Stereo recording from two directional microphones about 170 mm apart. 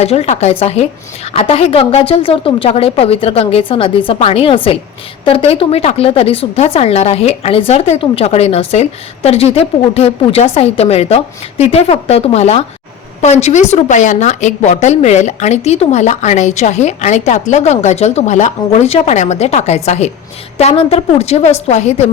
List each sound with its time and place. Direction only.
0.0 s a woman's voice: 40° left (ahead or behind)